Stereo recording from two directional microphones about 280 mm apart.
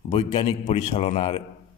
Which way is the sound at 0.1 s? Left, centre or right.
Left.